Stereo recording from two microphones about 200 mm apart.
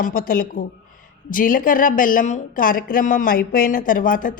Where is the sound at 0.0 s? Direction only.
45° left (ahead or behind).